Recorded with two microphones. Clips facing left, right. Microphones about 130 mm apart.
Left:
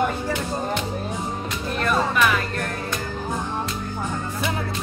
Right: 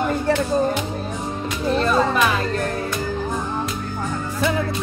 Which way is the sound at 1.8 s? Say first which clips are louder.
Right 2 dB; 30° right (ahead or behind).